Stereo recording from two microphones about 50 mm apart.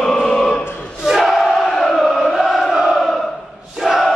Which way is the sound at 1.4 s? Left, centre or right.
Centre.